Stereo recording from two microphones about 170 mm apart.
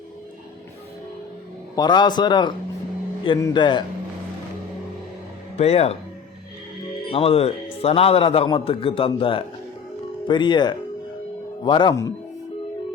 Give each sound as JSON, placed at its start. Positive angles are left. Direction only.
{"t": 1.7, "sound": "speech", "side_deg": 25}
{"t": 5.5, "sound": "a man's voice", "side_deg": 40}
{"t": 7.1, "sound": "a man's voice", "side_deg": 35}